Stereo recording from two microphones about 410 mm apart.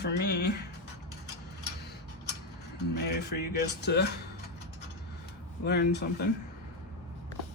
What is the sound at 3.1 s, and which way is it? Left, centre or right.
Music, left.